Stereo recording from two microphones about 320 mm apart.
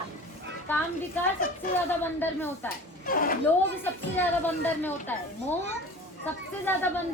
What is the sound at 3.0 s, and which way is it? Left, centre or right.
Speech, left.